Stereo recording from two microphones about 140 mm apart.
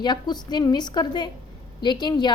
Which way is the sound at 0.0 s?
30° left (ahead or behind).